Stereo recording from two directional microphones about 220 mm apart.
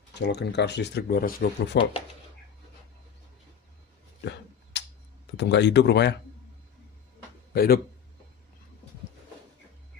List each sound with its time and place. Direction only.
0.1 s speech: 50° left (ahead or behind)
4.2 s a sound: 50° left (ahead or behind)
5.4 s speech: 50° left (ahead or behind)
7.5 s speech: 45° left (ahead or behind)